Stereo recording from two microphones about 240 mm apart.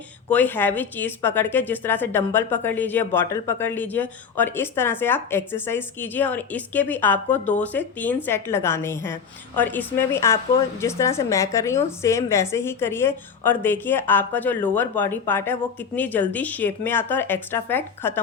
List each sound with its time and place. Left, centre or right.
0.3 s a woman's voice: centre